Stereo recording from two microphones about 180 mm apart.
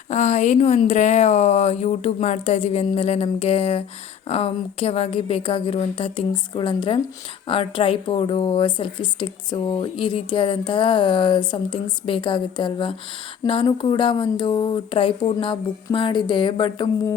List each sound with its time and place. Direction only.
0.1 s a woman's voice: 40° left (ahead or behind); by 17.2 s 25° left (ahead or behind)